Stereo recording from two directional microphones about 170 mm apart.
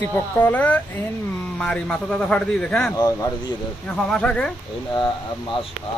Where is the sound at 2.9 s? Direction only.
20° left (ahead or behind).